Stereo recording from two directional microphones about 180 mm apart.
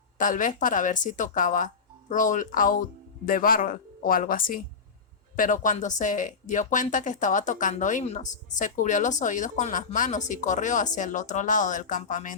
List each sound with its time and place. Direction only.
0.2 s speech: 45° left (ahead or behind)